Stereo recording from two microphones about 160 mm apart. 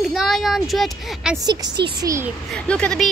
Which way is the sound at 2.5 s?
5° left (ahead or behind).